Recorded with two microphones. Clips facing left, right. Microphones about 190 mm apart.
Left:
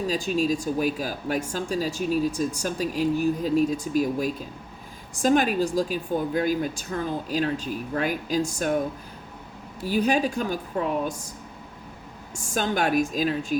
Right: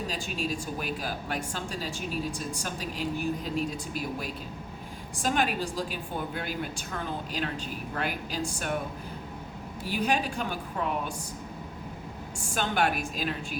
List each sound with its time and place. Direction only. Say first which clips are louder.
0.1 s a woman's voice: left 9 dB; 40° left (ahead or behind)
9.8 s speech: left 6 dB; 40° left (ahead or behind)
12.4 s speech: left 3 dB; 40° left (ahead or behind)